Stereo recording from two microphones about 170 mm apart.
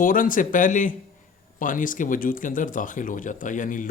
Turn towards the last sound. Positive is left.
turn(degrees=50)  # may be behind; listen again after turning